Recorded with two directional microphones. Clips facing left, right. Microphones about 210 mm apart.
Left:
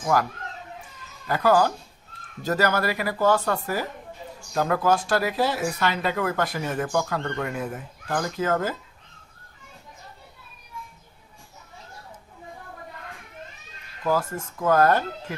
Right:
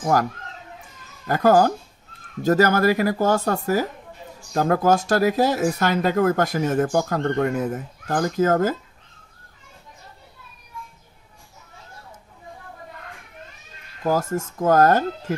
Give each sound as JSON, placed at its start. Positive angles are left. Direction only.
{"t": 0.0, "sound": "speech", "side_deg": -45}
{"t": 14.0, "sound": "speech", "side_deg": -45}